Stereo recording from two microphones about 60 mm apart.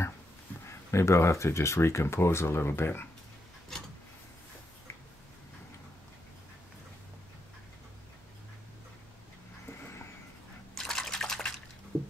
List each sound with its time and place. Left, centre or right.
0.7 s speech: left
3.7 s a sound: centre
9.7 s vehicle: left
10.7 s drip: centre